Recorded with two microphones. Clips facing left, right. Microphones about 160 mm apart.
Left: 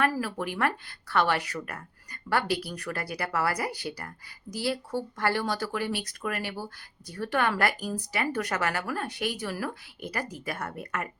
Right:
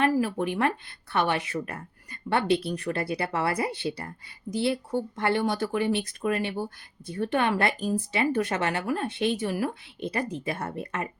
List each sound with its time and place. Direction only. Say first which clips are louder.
0.0 s a woman's voice: right 4 dB; 20° right (ahead or behind)